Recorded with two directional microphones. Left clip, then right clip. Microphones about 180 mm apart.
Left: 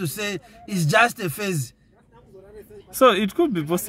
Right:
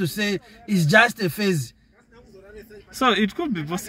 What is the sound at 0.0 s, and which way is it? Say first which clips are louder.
Speech: right 3 dB; 10° left (ahead or behind).